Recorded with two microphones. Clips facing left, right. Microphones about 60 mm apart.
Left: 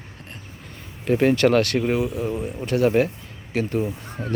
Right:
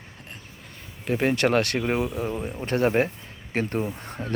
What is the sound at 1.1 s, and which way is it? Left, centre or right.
Speech, centre.